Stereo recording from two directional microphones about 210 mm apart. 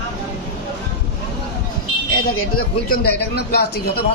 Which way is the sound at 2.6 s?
45° left (ahead or behind).